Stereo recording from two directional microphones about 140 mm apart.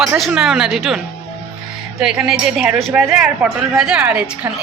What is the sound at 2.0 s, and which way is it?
A woman's voice, 5° right (ahead or behind).